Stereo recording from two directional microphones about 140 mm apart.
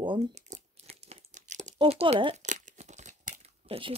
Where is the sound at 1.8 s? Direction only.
45° right (ahead or behind).